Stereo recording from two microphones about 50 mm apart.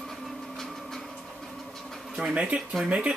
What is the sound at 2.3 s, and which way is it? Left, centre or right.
Speech, right.